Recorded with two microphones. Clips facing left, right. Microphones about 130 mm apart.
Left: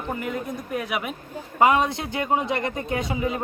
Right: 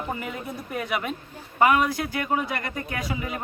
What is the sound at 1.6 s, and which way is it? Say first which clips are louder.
A man's voice: left 1 dB; 25° left (ahead or behind).